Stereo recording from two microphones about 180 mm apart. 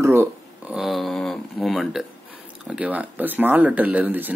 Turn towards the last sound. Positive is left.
turn(degrees=-10)  # may be behind; listen again after turning